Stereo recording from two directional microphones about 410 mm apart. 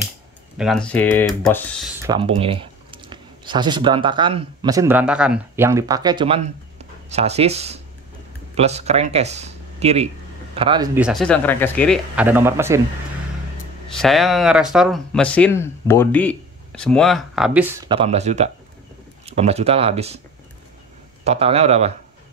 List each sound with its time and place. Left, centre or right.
0.6 s speech: centre
13.9 s speech: centre
21.2 s speech: centre